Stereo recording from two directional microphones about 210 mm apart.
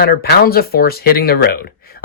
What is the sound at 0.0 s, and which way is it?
Speech, 45° left (ahead or behind).